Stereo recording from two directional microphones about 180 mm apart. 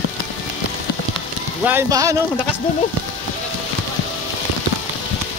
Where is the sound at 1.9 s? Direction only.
20° right (ahead or behind).